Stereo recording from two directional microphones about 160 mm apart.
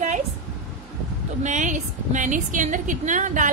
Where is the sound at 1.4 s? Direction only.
50° right (ahead or behind).